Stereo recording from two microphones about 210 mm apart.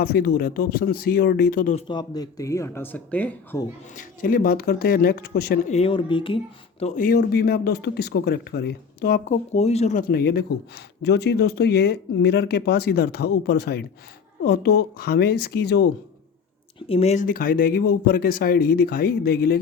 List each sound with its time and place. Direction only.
0.0 s speech: 45° left (ahead or behind)
1.9 s speech: 20° left (ahead or behind)
3.9 s speech: 45° left (ahead or behind)
5.7 s speech: 25° left (ahead or behind); by 15.9 s 50° left (ahead or behind)
16.9 s speech: 30° left (ahead or behind); by 19.5 s 45° left (ahead or behind)